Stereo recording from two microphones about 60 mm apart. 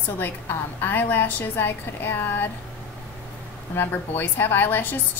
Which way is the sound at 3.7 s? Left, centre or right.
Left.